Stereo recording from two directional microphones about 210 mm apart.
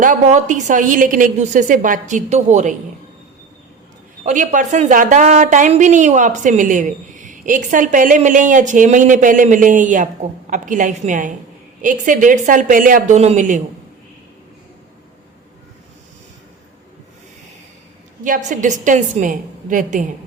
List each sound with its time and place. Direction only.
0.0 s a woman's voice: 35° right (ahead or behind)
4.3 s a woman's voice: 35° right (ahead or behind)
18.2 s a woman's voice: 35° right (ahead or behind)